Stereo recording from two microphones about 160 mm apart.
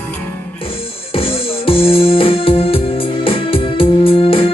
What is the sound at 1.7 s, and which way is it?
Music, 35° left (ahead or behind).